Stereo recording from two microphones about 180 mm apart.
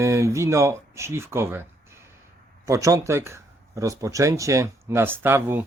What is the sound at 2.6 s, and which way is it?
Speech, 15° right (ahead or behind).